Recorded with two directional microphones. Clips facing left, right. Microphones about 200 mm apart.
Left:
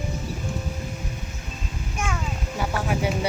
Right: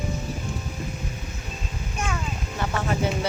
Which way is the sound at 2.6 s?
10° left (ahead or behind).